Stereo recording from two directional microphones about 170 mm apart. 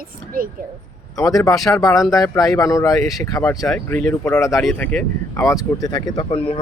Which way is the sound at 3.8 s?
10° left (ahead or behind).